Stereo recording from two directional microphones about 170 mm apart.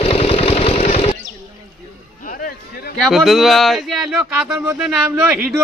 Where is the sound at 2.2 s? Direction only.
55° left (ahead or behind).